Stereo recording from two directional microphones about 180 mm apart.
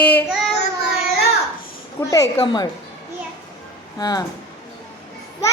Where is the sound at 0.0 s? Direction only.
10° left (ahead or behind).